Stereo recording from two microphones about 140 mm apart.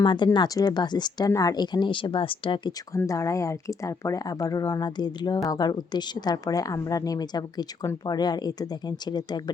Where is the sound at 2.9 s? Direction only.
20° left (ahead or behind).